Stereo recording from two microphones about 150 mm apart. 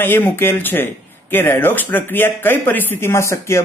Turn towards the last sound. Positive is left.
turn(degrees=20)  # may be behind; listen again after turning